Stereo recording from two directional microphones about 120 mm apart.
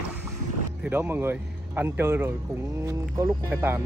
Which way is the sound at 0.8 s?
15° right (ahead or behind).